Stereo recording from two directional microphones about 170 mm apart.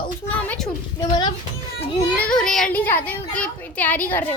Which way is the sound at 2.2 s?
5° left (ahead or behind).